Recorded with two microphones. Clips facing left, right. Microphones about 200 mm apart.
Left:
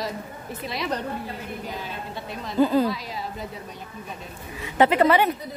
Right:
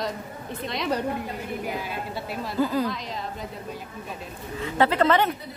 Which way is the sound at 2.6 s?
25° left (ahead or behind).